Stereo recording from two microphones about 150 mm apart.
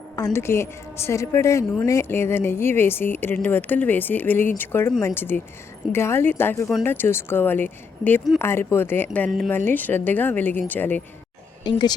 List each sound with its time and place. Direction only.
0.3 s speech: 15° left (ahead or behind)
11.6 s speech: 30° left (ahead or behind)